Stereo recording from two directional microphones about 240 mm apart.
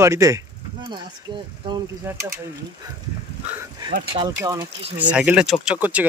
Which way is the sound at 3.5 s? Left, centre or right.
Centre.